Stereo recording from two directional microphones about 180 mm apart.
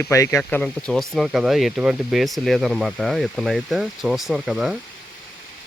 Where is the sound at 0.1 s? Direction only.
15° left (ahead or behind); by 4.8 s 5° right (ahead or behind).